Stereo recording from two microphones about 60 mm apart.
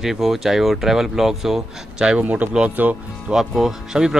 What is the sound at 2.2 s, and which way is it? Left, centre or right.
Speech, right.